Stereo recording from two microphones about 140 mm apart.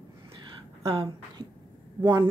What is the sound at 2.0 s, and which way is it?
Speech, 30° right (ahead or behind).